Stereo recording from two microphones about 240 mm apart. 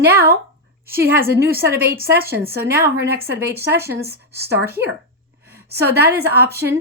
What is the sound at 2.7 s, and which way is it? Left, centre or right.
Speech, centre.